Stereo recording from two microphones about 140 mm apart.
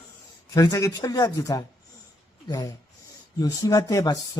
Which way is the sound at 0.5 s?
25° left (ahead or behind).